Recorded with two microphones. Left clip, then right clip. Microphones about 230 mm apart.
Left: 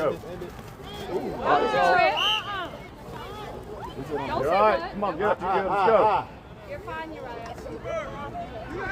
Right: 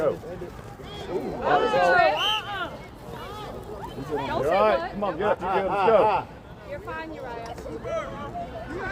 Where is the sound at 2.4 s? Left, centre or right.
Centre.